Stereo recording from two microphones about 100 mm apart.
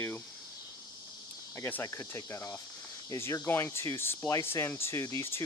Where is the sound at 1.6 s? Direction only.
20° left (ahead or behind).